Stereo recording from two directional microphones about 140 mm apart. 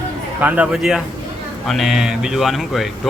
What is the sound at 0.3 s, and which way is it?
Speech, 10° right (ahead or behind).